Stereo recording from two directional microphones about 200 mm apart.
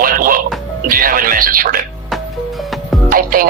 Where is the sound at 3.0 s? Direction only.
45° right (ahead or behind).